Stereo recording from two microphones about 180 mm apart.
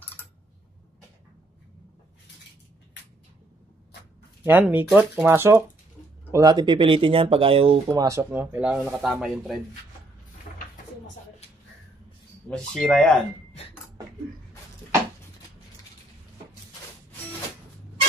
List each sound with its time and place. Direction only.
4.4 s speech: 10° right (ahead or behind); by 7.7 s 30° right (ahead or behind)
7.9 s speech: 15° right (ahead or behind)
12.4 s speech: 5° left (ahead or behind)